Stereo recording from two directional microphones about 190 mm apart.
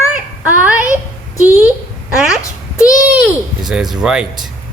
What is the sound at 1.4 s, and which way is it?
Speech, 10° right (ahead or behind).